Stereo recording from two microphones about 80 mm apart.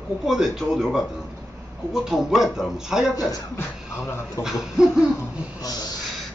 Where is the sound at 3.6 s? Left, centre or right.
Left.